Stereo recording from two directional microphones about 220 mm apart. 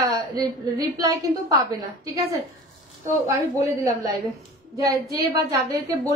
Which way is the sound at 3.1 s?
15° right (ahead or behind).